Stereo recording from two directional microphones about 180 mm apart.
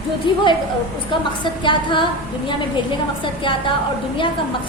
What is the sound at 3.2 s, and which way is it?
Speech, 30° left (ahead or behind).